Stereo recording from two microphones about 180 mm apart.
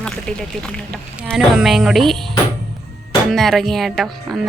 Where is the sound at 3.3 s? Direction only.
Centre (ahead or behind).